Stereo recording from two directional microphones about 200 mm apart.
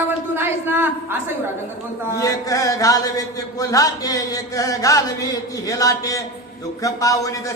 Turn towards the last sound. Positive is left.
turn(degrees=15)  # may be behind; listen again after turning